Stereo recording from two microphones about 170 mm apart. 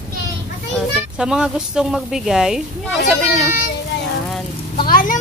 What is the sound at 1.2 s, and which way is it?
A woman's voice, 5° right (ahead or behind).